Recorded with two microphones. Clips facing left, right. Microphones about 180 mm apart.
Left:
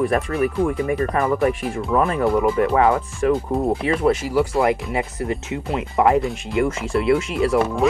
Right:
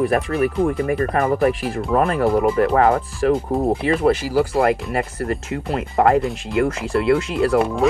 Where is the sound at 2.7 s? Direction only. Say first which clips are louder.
Right 1 dB; 40° right (ahead or behind).